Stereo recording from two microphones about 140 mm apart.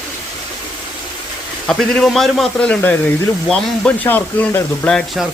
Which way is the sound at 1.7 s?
5° left (ahead or behind).